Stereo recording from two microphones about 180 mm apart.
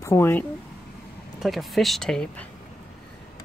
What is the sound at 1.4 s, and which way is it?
Speech, centre (ahead or behind).